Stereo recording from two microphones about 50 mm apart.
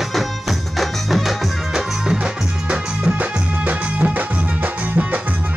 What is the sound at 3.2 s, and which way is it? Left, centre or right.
Music, right.